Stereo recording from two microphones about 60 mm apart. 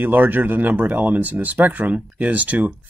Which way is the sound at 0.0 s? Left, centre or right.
Right.